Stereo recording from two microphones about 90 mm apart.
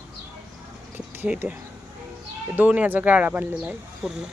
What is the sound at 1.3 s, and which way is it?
Speech, 15° right (ahead or behind).